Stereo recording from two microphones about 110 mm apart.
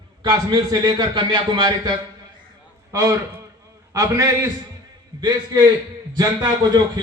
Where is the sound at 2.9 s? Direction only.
30° right (ahead or behind).